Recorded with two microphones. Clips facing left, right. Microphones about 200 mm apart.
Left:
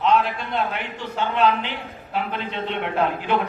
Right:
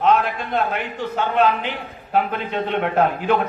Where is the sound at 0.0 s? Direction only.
50° right (ahead or behind).